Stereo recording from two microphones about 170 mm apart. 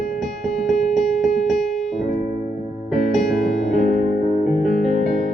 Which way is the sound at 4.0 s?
50° left (ahead or behind).